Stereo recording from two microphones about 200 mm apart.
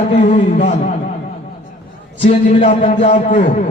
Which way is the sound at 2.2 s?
30° left (ahead or behind).